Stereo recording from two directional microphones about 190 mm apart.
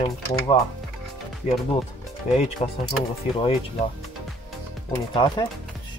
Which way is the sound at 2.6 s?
30° left (ahead or behind).